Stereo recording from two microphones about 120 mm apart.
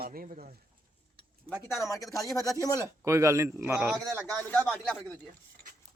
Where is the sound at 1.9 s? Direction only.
30° left (ahead or behind).